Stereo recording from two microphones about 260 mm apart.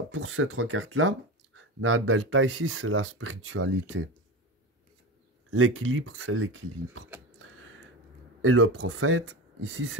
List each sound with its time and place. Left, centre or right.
0.1 s speech: right
5.5 s speech: right
8.4 s speech: right